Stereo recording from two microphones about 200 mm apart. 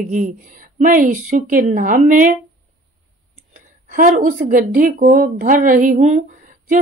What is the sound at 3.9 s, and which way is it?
Speech, 45° right (ahead or behind).